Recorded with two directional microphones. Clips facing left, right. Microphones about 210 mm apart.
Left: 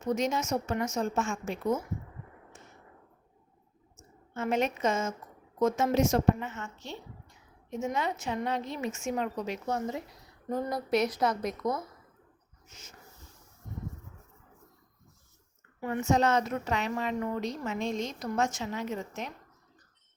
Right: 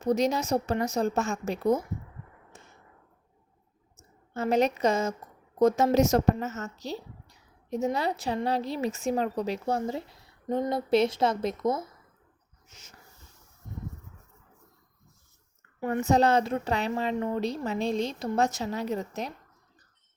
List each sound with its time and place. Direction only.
0.0 s a woman's voice: 35° right (ahead or behind)
3.9 s a woman's voice: 35° right (ahead or behind)
15.8 s a woman's voice: 40° right (ahead or behind)